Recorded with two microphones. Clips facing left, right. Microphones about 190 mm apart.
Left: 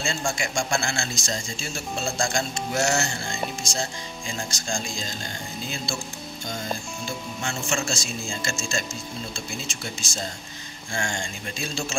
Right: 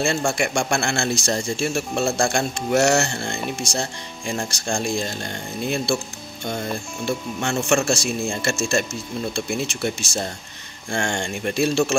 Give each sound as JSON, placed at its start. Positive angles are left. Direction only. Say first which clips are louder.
{"t": 0.0, "sound": "a man's voice", "louder": "right 7 dB", "side_deg": -65}
{"t": 7.1, "sound": "a man's voice", "louder": "right 9 dB", "side_deg": -65}